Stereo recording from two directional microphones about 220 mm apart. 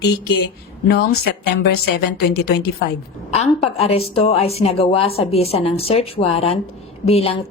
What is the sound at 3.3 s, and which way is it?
A woman's voice, 30° left (ahead or behind).